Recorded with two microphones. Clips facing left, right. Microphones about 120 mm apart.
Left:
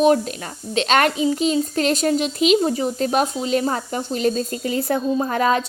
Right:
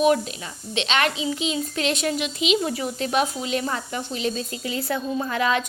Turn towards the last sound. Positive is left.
turn(degrees=40)  # may be behind; listen again after turning